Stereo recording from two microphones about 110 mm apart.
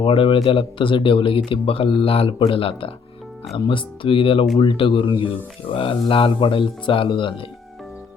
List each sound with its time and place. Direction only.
0.0 s speech: 55° left (ahead or behind)